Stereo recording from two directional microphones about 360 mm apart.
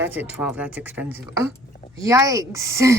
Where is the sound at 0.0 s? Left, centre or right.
Centre.